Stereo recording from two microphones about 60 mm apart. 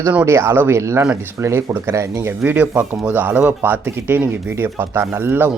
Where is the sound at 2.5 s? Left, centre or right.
Right.